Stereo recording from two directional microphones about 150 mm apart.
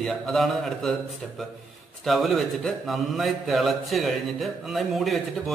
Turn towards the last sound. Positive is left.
turn(degrees=0)  # may be behind; listen again after turning